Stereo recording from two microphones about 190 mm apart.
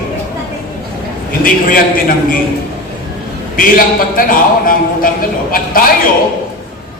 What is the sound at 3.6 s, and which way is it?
A man's voice, 50° left (ahead or behind).